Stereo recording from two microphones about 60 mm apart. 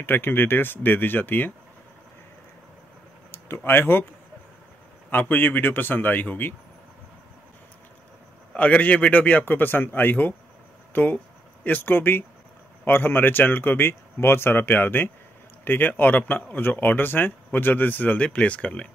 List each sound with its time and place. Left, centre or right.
0.0 s speech: left
3.3 s speech: left
5.1 s speech: left
8.5 s a man's voice: left